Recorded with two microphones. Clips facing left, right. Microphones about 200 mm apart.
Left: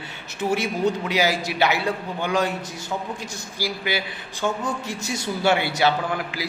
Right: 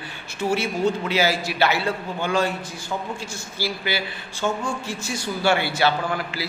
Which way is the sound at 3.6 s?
15° left (ahead or behind).